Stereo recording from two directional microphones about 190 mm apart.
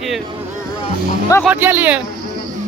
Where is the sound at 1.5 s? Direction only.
10° right (ahead or behind).